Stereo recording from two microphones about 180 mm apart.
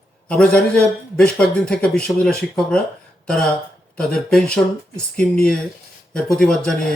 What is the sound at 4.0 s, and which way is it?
A man's voice, 5° left (ahead or behind).